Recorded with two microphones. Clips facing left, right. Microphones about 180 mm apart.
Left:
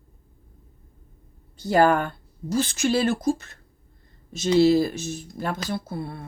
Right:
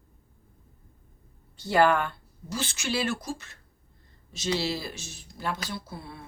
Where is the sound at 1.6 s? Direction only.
45° left (ahead or behind).